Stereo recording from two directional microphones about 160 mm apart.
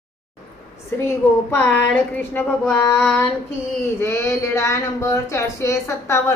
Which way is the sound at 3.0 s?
5° left (ahead or behind).